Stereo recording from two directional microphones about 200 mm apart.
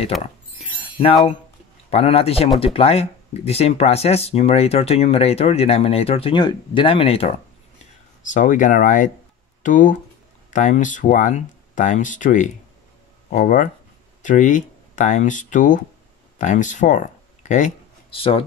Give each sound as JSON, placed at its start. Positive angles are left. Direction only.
{"t": 0.2, "sound": "a sound", "side_deg": 25}
{"t": 1.9, "sound": "a man's voice", "side_deg": 30}
{"t": 7.8, "sound": "speech", "side_deg": 40}